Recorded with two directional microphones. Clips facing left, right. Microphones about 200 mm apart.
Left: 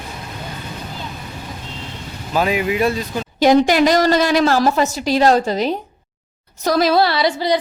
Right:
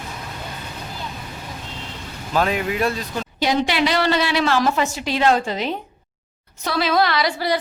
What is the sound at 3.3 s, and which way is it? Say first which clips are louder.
A woman's voice: left 8 dB; 50° left (ahead or behind).